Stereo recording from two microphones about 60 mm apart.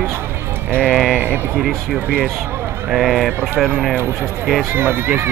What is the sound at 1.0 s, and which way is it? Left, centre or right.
Speech, right.